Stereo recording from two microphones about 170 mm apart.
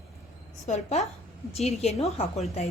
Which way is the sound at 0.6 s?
40° left (ahead or behind).